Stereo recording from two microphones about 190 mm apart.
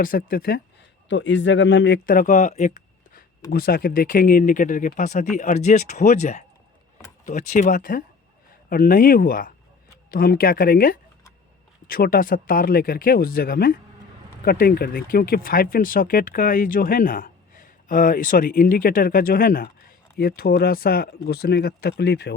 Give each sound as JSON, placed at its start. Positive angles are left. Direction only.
{"t": 0.0, "sound": "speech", "side_deg": 50}
{"t": 1.0, "sound": "speech", "side_deg": 75}
{"t": 3.5, "sound": "speech", "side_deg": 50}